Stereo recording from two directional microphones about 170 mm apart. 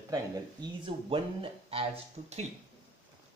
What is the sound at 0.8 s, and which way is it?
Speech, 30° right (ahead or behind).